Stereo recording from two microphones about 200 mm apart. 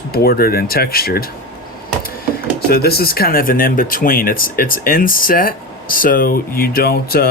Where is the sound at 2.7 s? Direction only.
50° left (ahead or behind).